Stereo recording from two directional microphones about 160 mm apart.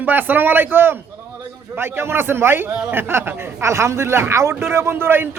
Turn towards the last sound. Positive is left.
turn(degrees=-15)  # may be behind; listen again after turning